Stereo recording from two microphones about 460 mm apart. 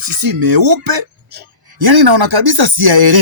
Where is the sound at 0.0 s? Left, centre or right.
Right.